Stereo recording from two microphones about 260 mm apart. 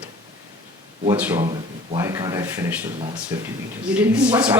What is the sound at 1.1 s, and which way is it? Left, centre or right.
A woman's voice, centre.